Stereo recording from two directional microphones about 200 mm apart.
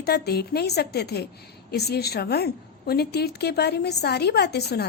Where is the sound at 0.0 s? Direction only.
50° left (ahead or behind).